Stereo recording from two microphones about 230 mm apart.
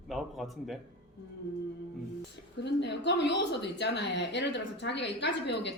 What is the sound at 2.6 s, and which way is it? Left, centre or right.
A woman's voice, left.